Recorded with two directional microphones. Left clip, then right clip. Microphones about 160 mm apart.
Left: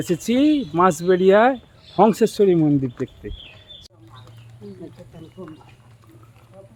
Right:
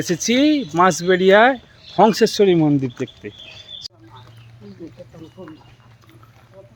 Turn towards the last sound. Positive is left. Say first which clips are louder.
# even
turn(degrees=-15)  # may be behind; listen again after turning